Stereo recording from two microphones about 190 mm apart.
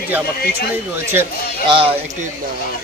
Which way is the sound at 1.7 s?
30° right (ahead or behind).